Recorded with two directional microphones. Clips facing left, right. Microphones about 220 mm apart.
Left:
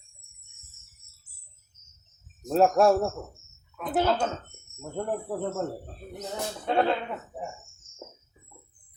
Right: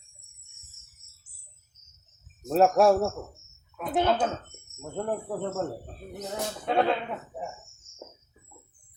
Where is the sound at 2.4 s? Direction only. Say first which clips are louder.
Even; centre (ahead or behind).